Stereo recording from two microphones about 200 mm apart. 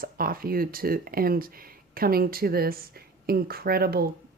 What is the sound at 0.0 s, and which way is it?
Speech, 45° right (ahead or behind).